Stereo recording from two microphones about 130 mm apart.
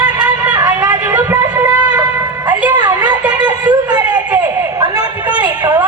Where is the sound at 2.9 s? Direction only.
10° right (ahead or behind).